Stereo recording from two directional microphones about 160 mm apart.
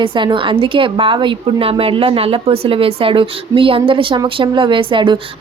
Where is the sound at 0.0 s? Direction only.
30° right (ahead or behind).